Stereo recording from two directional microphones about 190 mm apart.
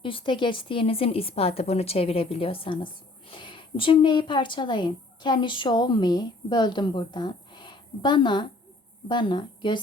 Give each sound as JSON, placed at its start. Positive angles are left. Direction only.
{"t": 0.0, "sound": "a woman's voice", "side_deg": 25}